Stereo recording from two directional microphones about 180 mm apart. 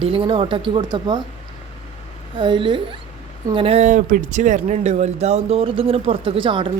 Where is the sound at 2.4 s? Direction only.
30° right (ahead or behind).